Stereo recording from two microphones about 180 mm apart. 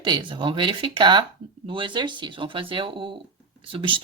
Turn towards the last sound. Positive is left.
turn(degrees=-30)  # may be behind; listen again after turning